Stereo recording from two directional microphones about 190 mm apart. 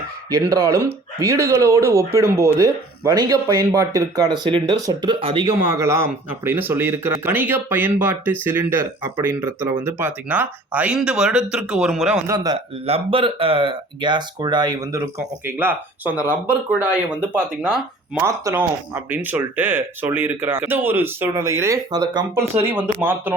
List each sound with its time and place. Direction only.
0.3 s speech: 15° right (ahead or behind)
5.5 s speech: 15° right (ahead or behind)
12.3 s speech: 20° right (ahead or behind)
12.8 s speech: 30° right (ahead or behind); by 23.3 s 10° right (ahead or behind)